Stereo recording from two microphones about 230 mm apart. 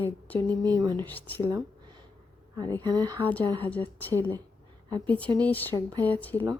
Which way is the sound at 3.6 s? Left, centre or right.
Centre.